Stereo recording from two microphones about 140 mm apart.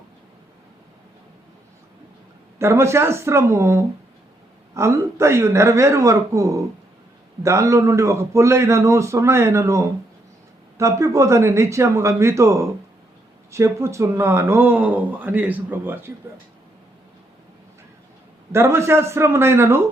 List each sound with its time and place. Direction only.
2.6 s a man's voice: 20° right (ahead or behind)
18.5 s a man's voice: 20° right (ahead or behind)